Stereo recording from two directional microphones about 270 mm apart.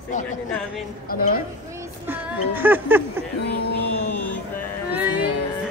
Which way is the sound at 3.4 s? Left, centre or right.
Left.